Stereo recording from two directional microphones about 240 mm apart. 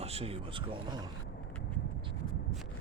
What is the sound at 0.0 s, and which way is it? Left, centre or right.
Speech, right.